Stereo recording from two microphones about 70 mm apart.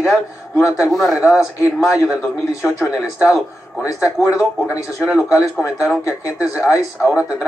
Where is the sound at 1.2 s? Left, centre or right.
Centre.